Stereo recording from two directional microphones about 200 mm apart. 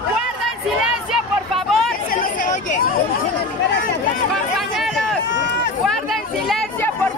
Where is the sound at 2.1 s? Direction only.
40° left (ahead or behind).